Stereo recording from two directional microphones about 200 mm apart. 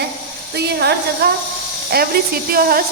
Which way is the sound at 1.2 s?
50° right (ahead or behind).